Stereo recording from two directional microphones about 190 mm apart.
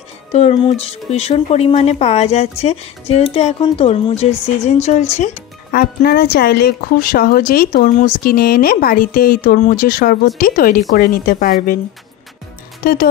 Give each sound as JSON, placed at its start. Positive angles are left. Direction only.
{"t": 0.3, "sound": "speech", "side_deg": 35}
{"t": 12.8, "sound": "speech", "side_deg": 50}